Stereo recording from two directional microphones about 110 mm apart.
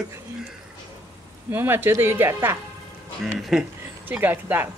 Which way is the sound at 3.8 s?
15° right (ahead or behind).